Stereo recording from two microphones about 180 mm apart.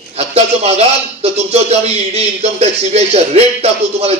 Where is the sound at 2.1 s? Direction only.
35° right (ahead or behind).